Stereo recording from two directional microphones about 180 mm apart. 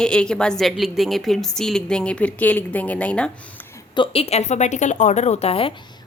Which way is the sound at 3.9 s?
30° left (ahead or behind).